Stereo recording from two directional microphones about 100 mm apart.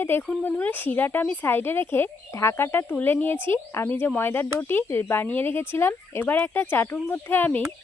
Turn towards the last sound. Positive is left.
turn(degrees=20)  # may be behind; listen again after turning